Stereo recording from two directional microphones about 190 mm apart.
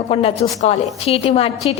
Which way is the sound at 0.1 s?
30° left (ahead or behind).